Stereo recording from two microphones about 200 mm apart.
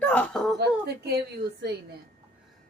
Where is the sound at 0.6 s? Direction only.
55° right (ahead or behind).